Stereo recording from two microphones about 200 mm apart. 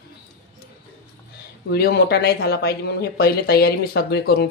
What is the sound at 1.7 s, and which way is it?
Speech, 50° left (ahead or behind).